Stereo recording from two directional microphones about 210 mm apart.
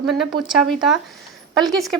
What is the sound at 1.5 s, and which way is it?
Speech, centre (ahead or behind).